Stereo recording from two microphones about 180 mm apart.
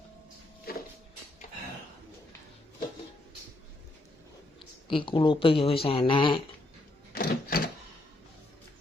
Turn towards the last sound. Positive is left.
turn(degrees=55)  # may be behind; listen again after turning